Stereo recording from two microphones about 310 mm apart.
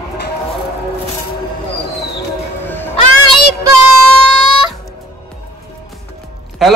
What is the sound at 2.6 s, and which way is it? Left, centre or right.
Music, centre.